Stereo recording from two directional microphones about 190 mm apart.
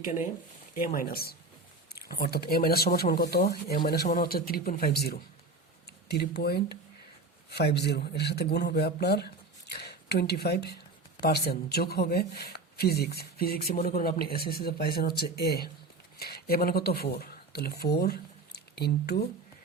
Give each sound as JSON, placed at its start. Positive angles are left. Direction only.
{"t": 0.0, "sound": "speech", "side_deg": 40}